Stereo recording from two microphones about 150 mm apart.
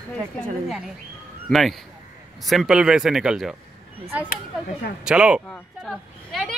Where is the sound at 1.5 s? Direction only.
Centre (ahead or behind).